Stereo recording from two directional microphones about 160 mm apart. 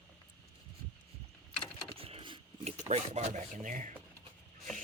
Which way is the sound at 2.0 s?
35° right (ahead or behind).